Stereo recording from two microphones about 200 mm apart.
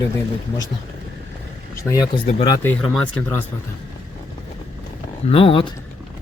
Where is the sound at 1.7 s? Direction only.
15° left (ahead or behind).